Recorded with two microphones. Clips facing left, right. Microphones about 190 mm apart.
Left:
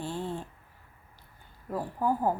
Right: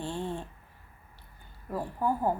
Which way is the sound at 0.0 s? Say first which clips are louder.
Even; 10° left (ahead or behind).